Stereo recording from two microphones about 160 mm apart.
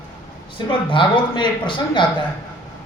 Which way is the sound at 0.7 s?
30° left (ahead or behind).